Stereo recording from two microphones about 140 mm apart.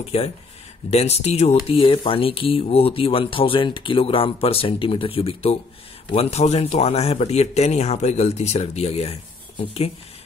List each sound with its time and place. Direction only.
0.1 s speech: 50° left (ahead or behind)
1.7 s speech: 40° left (ahead or behind)